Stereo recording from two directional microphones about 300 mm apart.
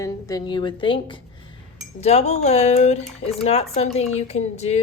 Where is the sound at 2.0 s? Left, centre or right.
Left.